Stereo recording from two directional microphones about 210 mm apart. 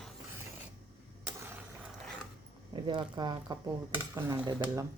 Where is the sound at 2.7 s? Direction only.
20° right (ahead or behind).